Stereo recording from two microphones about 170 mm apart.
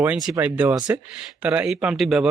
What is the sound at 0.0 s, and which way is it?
A man's voice, 5° right (ahead or behind).